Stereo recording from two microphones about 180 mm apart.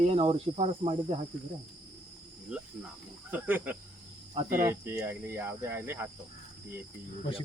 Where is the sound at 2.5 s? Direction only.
5° right (ahead or behind).